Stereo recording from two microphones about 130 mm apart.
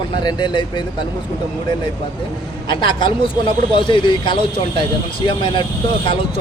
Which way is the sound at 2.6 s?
40° left (ahead or behind).